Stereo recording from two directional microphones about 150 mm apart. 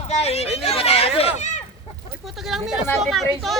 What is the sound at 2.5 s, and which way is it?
Speech, 5° right (ahead or behind).